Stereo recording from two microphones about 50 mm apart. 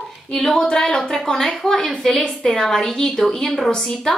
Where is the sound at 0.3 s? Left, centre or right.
Centre.